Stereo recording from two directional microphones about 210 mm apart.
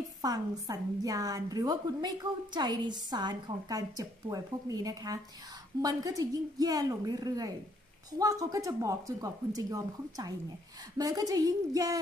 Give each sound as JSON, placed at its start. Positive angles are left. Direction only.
{"t": 0.2, "sound": "a woman's voice", "side_deg": -15}